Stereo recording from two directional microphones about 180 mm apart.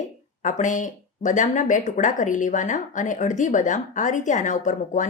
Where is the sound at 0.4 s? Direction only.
45° left (ahead or behind).